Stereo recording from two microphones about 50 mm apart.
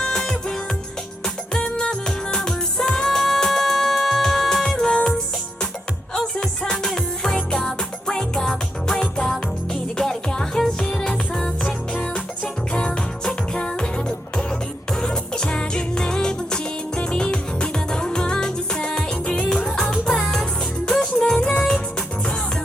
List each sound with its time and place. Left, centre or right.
0.0 s music: centre
12.1 s music: centre